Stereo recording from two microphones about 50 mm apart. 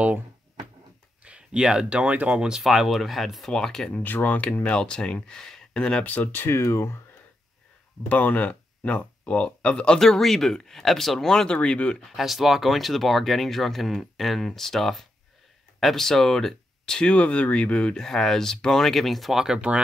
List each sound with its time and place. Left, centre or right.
1.2 s speech: right
2.5 s speech: centre
3.5 s speech: centre
3.9 s speech: left
4.6 s speech: centre
6.0 s speech: left
8.1 s speech: left
9.9 s speech: centre
11.5 s speech: left
12.2 s speech: centre
17.1 s speech: left
18.0 s speech: centre